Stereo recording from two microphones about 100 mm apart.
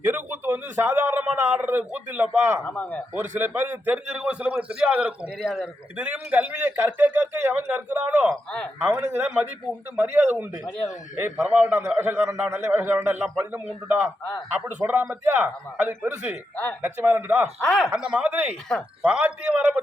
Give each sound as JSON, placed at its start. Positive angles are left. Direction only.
{"t": 0.0, "sound": "a sound", "side_deg": -20}
{"t": 1.2, "sound": "a man's voice", "side_deg": -10}
{"t": 2.6, "sound": "speech", "side_deg": 15}
{"t": 3.2, "sound": "a man's voice", "side_deg": -25}
{"t": 11.3, "sound": "a man's voice", "side_deg": -10}
{"t": 11.9, "sound": "a man's voice", "side_deg": -20}
{"t": 17.7, "sound": "speech", "side_deg": 5}
{"t": 17.9, "sound": "a man's voice", "side_deg": -10}